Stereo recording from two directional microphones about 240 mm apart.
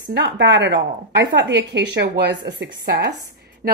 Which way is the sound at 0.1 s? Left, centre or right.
Right.